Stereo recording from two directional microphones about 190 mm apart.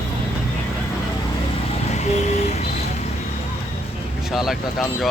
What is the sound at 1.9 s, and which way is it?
Vehicle, 35° left (ahead or behind).